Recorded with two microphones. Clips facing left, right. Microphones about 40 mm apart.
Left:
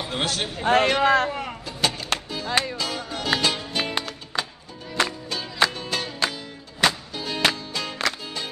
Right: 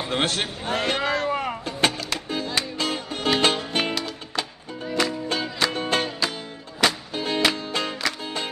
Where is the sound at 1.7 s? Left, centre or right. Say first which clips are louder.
Even; right.